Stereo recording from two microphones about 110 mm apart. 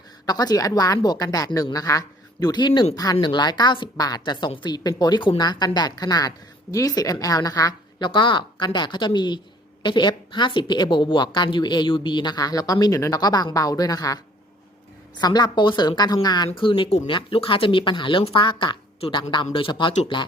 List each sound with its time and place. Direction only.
0.3 s a woman's voice: 35° left (ahead or behind)
15.2 s a woman's voice: 40° left (ahead or behind)
16.6 s speech: 50° left (ahead or behind)
18.9 s speech: 60° left (ahead or behind)